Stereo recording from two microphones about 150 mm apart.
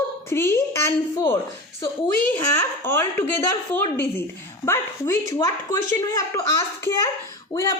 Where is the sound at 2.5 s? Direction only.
15° left (ahead or behind).